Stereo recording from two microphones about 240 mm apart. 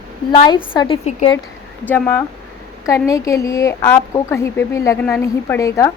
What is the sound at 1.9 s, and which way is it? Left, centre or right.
A woman's voice, centre.